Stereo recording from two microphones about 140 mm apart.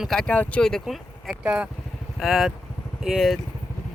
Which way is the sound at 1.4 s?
10° right (ahead or behind).